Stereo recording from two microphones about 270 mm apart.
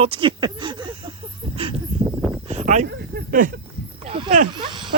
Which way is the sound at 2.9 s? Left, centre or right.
Right.